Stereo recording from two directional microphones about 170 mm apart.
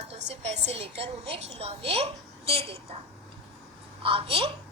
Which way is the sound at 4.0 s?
30° right (ahead or behind).